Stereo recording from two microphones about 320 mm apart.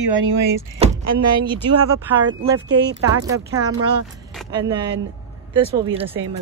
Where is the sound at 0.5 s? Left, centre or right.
Centre.